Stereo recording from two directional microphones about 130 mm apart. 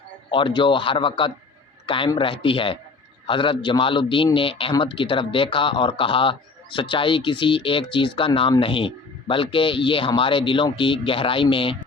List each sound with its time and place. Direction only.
0.3 s speech: 40° left (ahead or behind)